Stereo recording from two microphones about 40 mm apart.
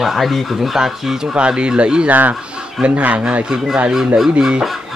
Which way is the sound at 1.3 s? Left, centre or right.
Right.